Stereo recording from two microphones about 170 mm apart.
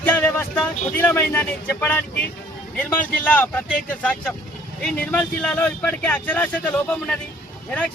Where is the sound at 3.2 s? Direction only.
10° left (ahead or behind).